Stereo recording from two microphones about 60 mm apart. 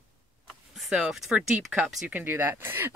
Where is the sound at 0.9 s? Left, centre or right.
Centre.